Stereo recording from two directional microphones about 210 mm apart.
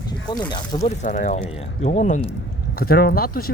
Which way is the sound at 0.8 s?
35° left (ahead or behind).